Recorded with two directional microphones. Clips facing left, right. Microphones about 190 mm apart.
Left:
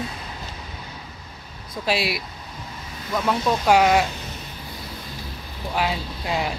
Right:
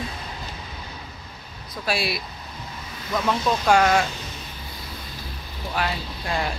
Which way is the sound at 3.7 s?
10° left (ahead or behind).